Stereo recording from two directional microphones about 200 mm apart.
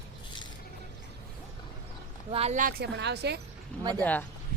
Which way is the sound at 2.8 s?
55° right (ahead or behind).